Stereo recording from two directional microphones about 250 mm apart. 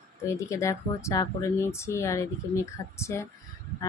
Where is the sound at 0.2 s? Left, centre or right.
Centre.